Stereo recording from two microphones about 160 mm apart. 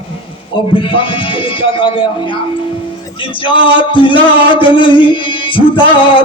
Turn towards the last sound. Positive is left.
turn(degrees=35)  # may be behind; listen again after turning